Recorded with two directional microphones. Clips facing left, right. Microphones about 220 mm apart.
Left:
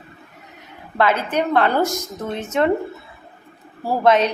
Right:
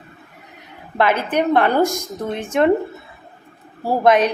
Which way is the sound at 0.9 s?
15° right (ahead or behind).